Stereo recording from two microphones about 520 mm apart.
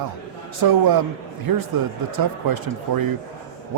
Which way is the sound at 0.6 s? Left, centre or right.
Right.